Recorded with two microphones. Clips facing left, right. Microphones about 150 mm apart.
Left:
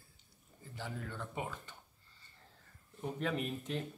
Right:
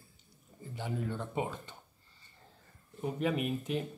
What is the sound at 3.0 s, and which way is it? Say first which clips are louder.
Speech: right 5 dB; 10° right (ahead or behind).